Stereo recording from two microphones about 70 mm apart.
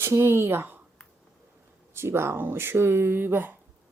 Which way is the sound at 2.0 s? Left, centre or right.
Right.